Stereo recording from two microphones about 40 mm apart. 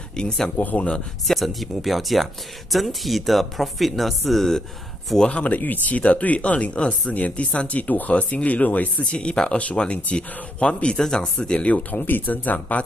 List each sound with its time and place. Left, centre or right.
0.1 s speech: centre
1.2 s speech: centre
5.3 s speech: left
9.1 s speech: left
11.9 s speech: left